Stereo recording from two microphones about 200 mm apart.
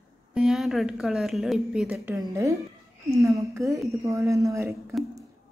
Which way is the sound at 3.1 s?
15° right (ahead or behind).